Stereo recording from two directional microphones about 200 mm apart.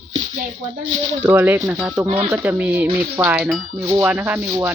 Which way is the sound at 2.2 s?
10° right (ahead or behind).